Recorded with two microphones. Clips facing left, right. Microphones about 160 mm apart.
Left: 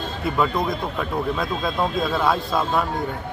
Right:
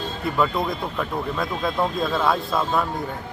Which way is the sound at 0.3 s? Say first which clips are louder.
Even; centre (ahead or behind).